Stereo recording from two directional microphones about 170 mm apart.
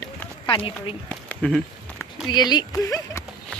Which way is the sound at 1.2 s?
5° left (ahead or behind).